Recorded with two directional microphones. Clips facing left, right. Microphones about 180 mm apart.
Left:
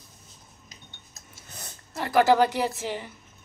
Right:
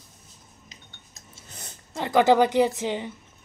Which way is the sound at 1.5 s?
20° right (ahead or behind).